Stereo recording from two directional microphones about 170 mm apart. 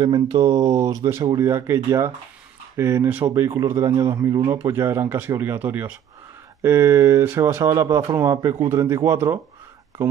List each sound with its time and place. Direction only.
0.0 s speech: 25° right (ahead or behind)